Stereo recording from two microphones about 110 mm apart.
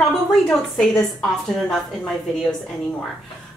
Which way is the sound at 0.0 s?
5° left (ahead or behind).